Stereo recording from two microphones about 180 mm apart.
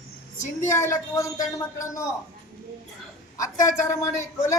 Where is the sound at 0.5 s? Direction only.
15° left (ahead or behind).